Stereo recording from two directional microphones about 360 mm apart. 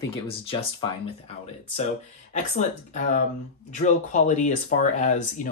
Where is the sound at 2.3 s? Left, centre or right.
Centre.